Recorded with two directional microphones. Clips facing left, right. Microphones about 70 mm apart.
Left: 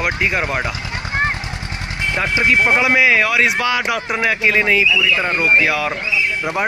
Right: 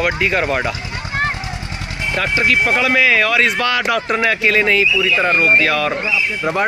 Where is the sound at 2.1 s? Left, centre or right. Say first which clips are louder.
Even; left.